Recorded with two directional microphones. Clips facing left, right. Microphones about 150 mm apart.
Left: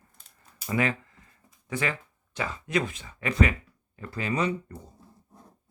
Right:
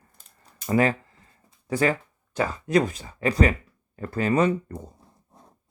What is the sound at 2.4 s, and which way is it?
Speech, 40° right (ahead or behind).